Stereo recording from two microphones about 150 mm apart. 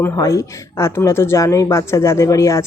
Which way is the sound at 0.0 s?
20° left (ahead or behind).